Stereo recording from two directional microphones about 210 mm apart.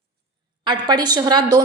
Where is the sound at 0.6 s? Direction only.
20° right (ahead or behind).